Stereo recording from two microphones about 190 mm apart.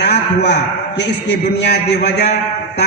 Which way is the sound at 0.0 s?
60° left (ahead or behind).